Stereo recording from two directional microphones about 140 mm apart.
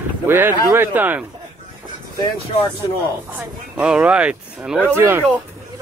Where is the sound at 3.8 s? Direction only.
10° right (ahead or behind).